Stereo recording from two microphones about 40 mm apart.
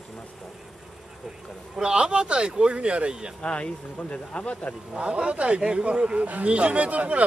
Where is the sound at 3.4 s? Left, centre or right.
Left.